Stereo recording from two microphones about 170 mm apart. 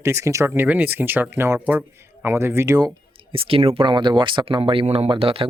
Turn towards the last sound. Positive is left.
turn(degrees=-35)  # may be behind; listen again after turning